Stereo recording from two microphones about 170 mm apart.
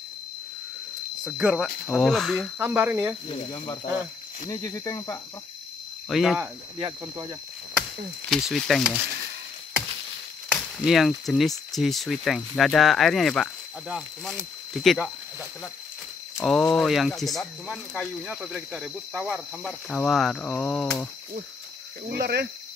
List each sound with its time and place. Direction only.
1.2 s speech: 5° right (ahead or behind)
2.6 s speech: 10° right (ahead or behind)
3.3 s speech: 30° left (ahead or behind)
6.0 s speech: centre (ahead or behind)
6.8 s speech: 25° right (ahead or behind)
8.3 s speech: centre (ahead or behind)
10.5 s speech: centre (ahead or behind)
16.3 s speech: centre (ahead or behind)
22.1 s speech: 70° right (ahead or behind)